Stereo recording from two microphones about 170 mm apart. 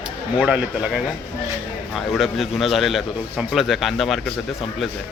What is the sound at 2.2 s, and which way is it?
A man's voice, centre (ahead or behind).